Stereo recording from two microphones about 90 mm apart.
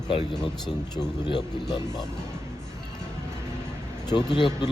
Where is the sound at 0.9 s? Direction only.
50° left (ahead or behind).